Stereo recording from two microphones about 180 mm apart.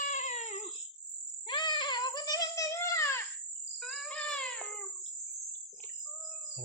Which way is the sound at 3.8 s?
5° left (ahead or behind).